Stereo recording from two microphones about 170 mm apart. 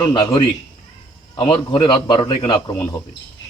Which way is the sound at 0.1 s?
25° left (ahead or behind).